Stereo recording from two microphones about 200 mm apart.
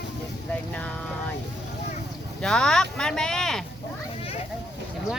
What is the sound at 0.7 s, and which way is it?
Speech, 5° left (ahead or behind).